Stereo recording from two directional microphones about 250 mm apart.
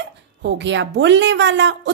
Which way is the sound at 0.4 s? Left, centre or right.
Right.